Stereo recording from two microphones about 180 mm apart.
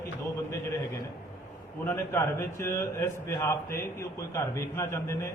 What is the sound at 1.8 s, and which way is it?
A man's voice, 15° left (ahead or behind).